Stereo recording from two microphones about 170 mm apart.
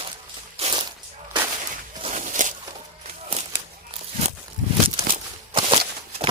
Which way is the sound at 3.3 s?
35° right (ahead or behind).